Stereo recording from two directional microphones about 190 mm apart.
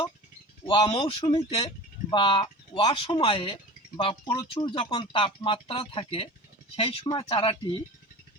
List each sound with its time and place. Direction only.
0.6 s speech: 25° left (ahead or behind)